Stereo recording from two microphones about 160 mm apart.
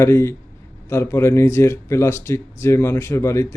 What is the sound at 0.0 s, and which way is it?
Speech, 15° left (ahead or behind).